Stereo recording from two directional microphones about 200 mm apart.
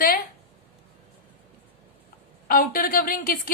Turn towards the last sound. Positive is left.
turn(degrees=45)  # may be behind; listen again after turning